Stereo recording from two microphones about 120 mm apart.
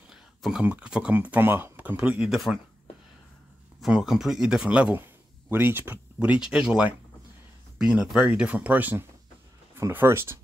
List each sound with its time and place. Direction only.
0.4 s speech: 5° right (ahead or behind)
3.8 s speech: 5° right (ahead or behind); by 10.4 s 20° right (ahead or behind)